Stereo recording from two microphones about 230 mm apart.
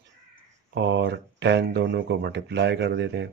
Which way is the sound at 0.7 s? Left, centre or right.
Right.